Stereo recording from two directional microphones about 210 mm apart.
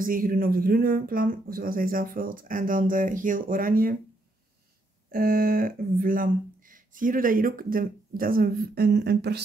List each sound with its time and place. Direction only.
0.0 s speech: 40° right (ahead or behind)
5.1 s speech: 45° right (ahead or behind)